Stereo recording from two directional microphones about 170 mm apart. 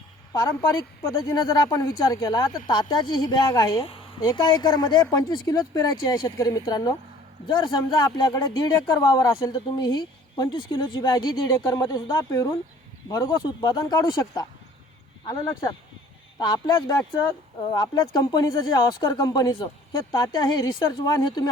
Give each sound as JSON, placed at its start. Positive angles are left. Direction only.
{"t": 0.3, "sound": "speech", "side_deg": 20}